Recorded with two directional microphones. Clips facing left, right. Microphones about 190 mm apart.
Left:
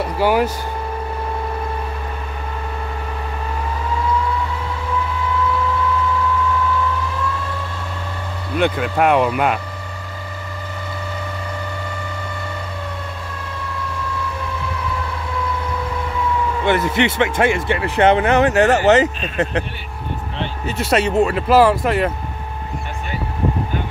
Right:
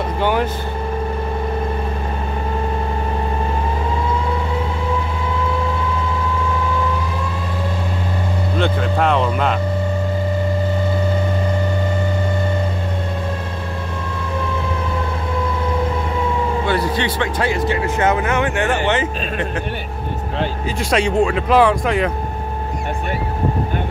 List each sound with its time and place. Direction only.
0.2 s speech: 5° left (ahead or behind)
8.5 s speech: 10° left (ahead or behind)
16.6 s speech: 20° left (ahead or behind); by 19.4 s 40° left (ahead or behind)
20.9 s speech: 5° left (ahead or behind)